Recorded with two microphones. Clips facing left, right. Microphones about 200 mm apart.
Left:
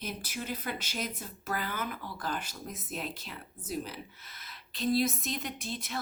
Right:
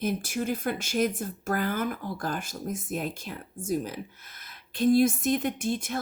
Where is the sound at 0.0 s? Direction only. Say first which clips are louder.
Right 10 dB; 50° right (ahead or behind).